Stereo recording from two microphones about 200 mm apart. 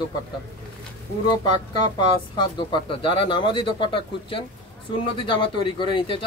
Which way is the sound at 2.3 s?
25° left (ahead or behind).